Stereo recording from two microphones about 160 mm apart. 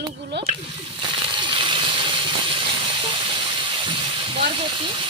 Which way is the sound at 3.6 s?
35° right (ahead or behind).